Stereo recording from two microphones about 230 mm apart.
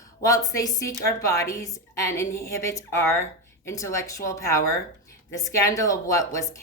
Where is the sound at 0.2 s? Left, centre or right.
Centre.